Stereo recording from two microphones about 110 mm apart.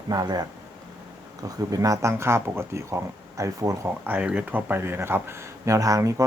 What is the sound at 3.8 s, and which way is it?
Speech, 15° right (ahead or behind).